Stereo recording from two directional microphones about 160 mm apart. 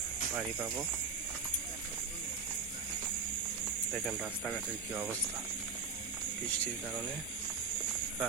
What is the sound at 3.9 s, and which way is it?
Speech, centre (ahead or behind).